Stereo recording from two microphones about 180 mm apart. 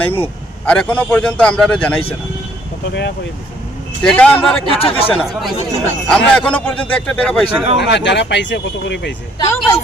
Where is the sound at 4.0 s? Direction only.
5° left (ahead or behind).